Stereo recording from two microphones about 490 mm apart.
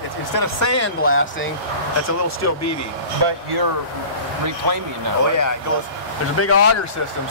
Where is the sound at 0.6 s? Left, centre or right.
Left.